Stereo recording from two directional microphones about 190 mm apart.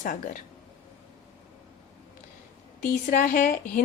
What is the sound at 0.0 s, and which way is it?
Speech, 45° left (ahead or behind).